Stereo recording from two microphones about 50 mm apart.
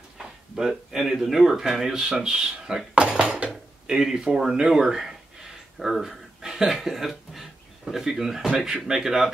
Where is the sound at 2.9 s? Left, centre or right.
Centre.